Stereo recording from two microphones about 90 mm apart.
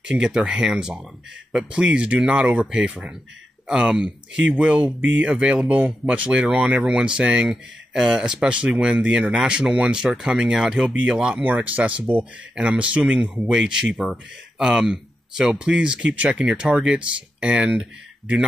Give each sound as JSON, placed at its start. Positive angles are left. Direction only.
{"t": 0.0, "sound": "speech", "side_deg": -10}